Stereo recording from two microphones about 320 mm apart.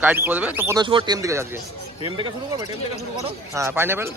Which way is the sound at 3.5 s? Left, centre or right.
Centre.